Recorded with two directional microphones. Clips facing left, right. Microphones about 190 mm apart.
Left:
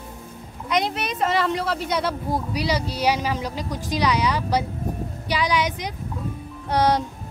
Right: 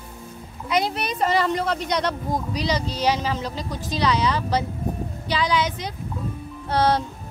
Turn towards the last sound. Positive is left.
turn(degrees=15)  # may be behind; listen again after turning